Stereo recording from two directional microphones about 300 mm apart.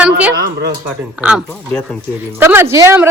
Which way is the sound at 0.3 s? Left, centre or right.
Right.